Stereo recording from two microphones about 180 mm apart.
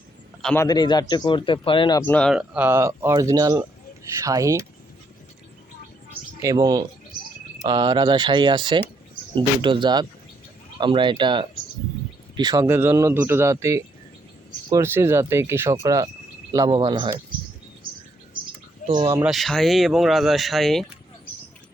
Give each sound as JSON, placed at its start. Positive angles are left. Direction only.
{"t": 0.4, "sound": "a man's voice", "side_deg": 15}
{"t": 2.0, "sound": "speech", "side_deg": 10}
{"t": 6.4, "sound": "speech", "side_deg": -20}
{"t": 12.6, "sound": "speech", "side_deg": -10}
{"t": 18.8, "sound": "a sound", "side_deg": 45}
{"t": 19.1, "sound": "speech", "side_deg": -5}